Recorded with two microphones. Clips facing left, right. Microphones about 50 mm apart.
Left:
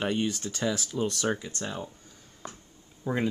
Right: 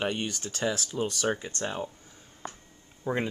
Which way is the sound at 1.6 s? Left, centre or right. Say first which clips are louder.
Right 3 dB; right.